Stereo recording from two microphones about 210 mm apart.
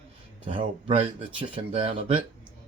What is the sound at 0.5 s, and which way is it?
Speech, 30° right (ahead or behind).